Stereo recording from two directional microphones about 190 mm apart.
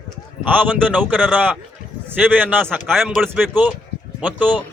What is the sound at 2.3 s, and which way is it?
Speech, 10° right (ahead or behind).